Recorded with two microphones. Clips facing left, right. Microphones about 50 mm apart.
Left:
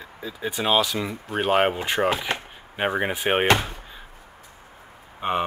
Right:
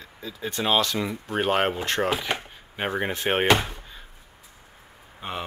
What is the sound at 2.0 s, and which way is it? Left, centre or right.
Speech, centre.